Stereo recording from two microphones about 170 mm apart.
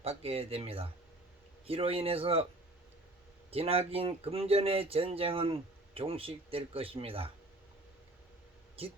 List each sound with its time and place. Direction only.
0.0 s speech: 35° right (ahead or behind)
3.5 s speech: 35° right (ahead or behind)